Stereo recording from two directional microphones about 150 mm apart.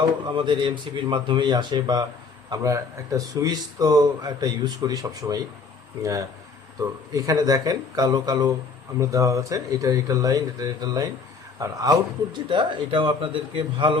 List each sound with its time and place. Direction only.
0.0 s speech: 30° right (ahead or behind)